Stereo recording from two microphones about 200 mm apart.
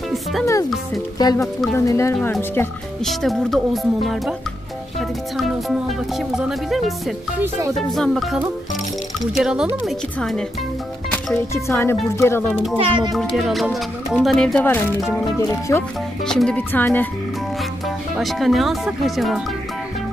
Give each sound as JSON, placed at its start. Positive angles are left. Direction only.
{"t": 0.1, "sound": "speech", "side_deg": 0}
{"t": 1.1, "sound": "a woman's voice", "side_deg": 15}
{"t": 3.1, "sound": "speech", "side_deg": 0}
{"t": 5.4, "sound": "speech", "side_deg": 0}
{"t": 11.1, "sound": "a woman's voice", "side_deg": 10}
{"t": 12.8, "sound": "speech", "side_deg": -25}
{"t": 13.1, "sound": "a woman's voice", "side_deg": 0}
{"t": 18.1, "sound": "speech", "side_deg": 0}